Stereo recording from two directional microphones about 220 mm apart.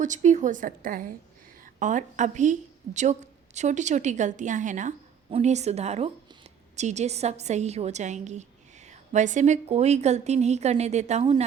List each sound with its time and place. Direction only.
0.0 s a woman's voice: 35° right (ahead or behind)